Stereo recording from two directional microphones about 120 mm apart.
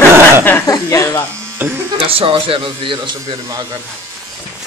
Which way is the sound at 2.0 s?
50° right (ahead or behind).